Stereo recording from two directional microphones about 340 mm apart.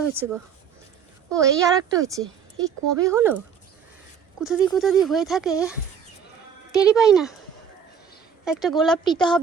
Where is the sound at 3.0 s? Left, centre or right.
Centre.